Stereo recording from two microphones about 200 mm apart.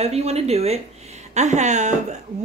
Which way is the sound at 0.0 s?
30° right (ahead or behind).